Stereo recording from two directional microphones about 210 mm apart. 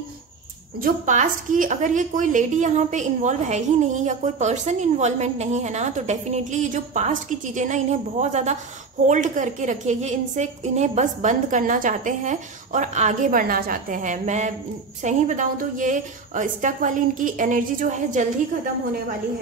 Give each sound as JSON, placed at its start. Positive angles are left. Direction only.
{"t": 0.7, "sound": "a woman's voice", "side_deg": -40}